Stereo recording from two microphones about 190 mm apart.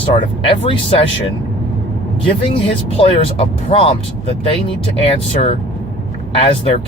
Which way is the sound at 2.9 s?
30° left (ahead or behind).